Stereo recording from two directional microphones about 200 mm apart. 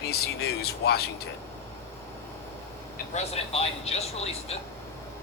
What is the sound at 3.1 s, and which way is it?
Speech, 30° left (ahead or behind).